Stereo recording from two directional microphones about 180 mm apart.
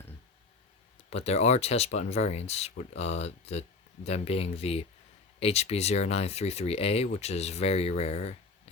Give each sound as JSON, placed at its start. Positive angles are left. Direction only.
{"t": 1.1, "sound": "speech", "side_deg": 35}